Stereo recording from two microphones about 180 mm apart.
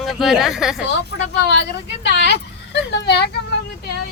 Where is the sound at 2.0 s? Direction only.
70° left (ahead or behind).